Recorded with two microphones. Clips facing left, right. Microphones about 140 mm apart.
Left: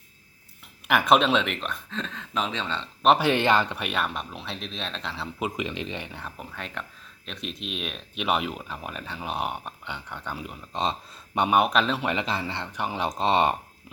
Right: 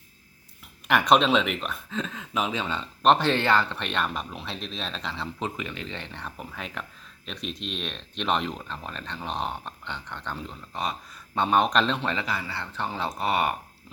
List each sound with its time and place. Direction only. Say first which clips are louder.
0.9 s speech: even; centre (ahead or behind)
3.0 s speech: left 1 dB; 5° left (ahead or behind)
5.5 s speech: left 4 dB; 20° left (ahead or behind); by 12.0 s 5° left (ahead or behind)
12.0 s speech: left 2 dB; 20° left (ahead or behind)